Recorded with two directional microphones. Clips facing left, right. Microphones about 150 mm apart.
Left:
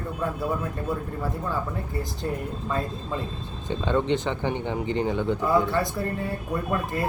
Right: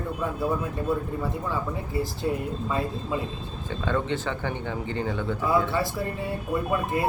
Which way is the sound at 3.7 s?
20° left (ahead or behind).